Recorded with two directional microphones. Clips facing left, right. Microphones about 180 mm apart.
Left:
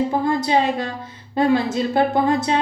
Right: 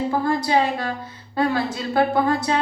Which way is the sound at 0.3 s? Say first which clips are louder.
Even; 20° left (ahead or behind).